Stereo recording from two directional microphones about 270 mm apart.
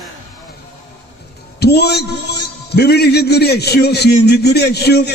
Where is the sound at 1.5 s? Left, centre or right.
Left.